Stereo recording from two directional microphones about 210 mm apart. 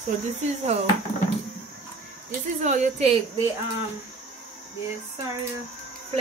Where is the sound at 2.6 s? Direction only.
35° right (ahead or behind).